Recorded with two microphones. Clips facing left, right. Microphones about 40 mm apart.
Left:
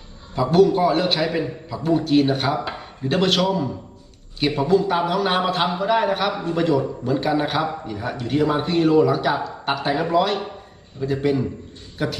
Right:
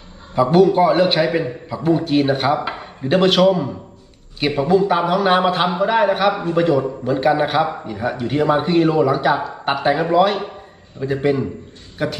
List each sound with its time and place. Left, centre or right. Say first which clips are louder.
0.3 s a man's voice: right 3 dB; centre